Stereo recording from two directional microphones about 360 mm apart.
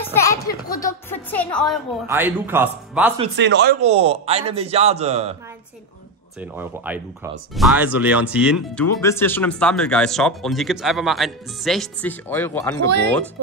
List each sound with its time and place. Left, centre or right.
0.0 s a sound: centre
0.7 s speech: centre
3.3 s speech: right
3.8 s a man's voice: centre
6.5 s speech: centre